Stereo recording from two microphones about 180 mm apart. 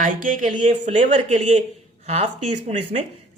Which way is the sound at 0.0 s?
45° right (ahead or behind).